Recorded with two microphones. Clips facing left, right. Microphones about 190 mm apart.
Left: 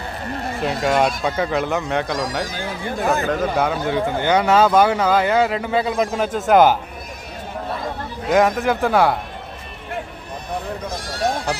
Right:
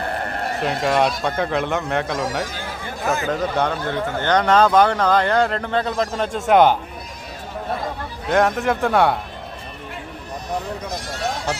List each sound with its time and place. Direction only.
0.0 s a sound: 60° right (ahead or behind)
0.6 s a man's voice: centre (ahead or behind)
8.3 s a man's voice: centre (ahead or behind)